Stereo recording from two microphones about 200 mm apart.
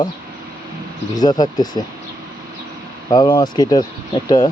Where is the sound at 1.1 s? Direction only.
20° left (ahead or behind).